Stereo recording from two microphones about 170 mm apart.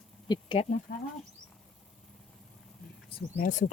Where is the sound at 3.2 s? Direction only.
55° left (ahead or behind).